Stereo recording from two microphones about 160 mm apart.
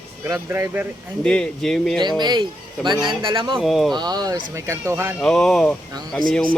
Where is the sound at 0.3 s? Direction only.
15° right (ahead or behind).